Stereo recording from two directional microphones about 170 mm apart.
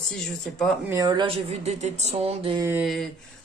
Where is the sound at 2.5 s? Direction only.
15° right (ahead or behind).